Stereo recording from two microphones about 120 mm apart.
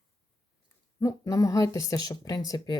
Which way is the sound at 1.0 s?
25° left (ahead or behind).